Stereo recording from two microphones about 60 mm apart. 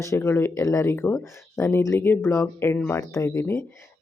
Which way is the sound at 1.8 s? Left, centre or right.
Left.